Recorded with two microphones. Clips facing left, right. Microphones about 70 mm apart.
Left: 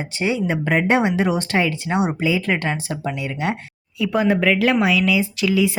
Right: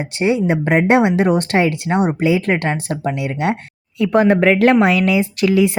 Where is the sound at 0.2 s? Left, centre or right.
Right.